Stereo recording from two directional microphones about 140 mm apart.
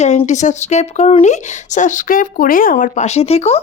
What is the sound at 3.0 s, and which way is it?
Speech, 50° left (ahead or behind).